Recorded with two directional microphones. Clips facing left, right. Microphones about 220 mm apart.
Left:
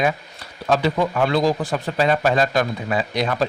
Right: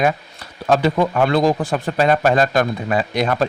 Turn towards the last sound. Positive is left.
turn(degrees=-50)  # may be behind; listen again after turning